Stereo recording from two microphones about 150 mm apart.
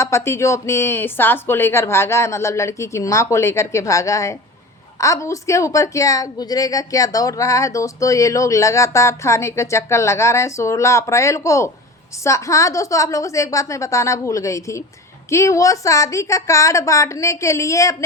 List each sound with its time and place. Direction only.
0.0 s a woman's voice: 20° left (ahead or behind)